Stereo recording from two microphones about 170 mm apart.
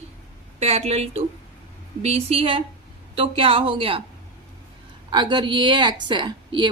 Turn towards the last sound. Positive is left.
turn(degrees=-25)  # may be behind; listen again after turning